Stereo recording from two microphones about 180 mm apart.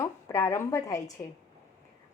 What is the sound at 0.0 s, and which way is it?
A woman's voice, 20° left (ahead or behind).